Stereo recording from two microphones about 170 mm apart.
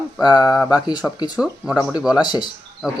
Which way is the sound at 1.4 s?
5° right (ahead or behind).